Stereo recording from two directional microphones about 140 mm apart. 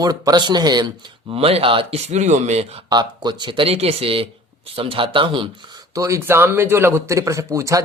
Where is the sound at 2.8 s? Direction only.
30° right (ahead or behind).